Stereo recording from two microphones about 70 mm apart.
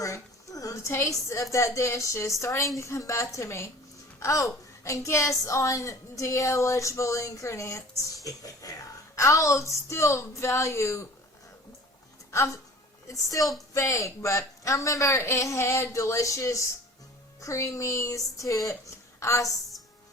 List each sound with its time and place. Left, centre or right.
0.0 s a sound: left
1.5 s a woman's voice: left
9.1 s a woman's voice: left
13.1 s a woman's voice: left
18.7 s a woman's voice: left